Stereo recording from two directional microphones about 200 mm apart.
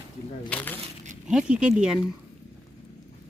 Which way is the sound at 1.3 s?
5° right (ahead or behind).